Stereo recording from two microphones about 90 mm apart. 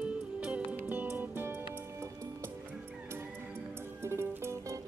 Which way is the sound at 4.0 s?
30° right (ahead or behind).